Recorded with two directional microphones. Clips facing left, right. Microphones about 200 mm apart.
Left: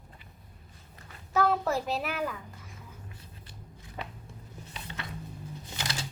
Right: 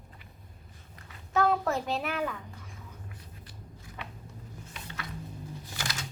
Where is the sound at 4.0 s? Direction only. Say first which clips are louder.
Left 4 dB; 35° left (ahead or behind).